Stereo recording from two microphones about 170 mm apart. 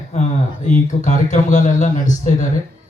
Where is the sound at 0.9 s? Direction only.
45° left (ahead or behind).